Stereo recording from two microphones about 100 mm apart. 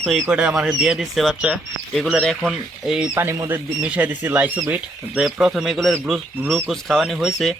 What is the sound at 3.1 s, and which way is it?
Speech, 20° right (ahead or behind).